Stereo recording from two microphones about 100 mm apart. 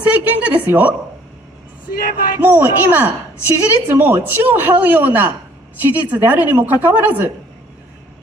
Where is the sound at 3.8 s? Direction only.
20° right (ahead or behind).